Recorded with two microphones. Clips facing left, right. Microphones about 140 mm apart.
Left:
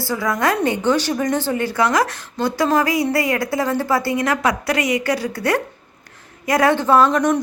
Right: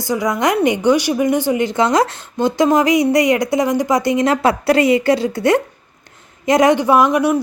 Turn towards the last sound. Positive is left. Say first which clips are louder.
# right 2 dB
turn(degrees=-10)  # may be behind; listen again after turning